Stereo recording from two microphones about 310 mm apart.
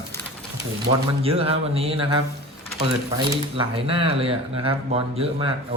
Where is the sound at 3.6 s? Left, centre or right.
Centre.